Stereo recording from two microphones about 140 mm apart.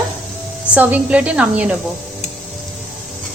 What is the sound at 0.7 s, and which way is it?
A woman's voice, 10° right (ahead or behind).